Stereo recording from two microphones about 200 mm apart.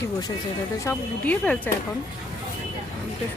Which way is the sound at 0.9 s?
10° left (ahead or behind).